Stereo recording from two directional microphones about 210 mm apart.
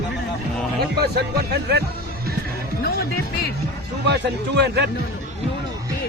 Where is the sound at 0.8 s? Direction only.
50° right (ahead or behind).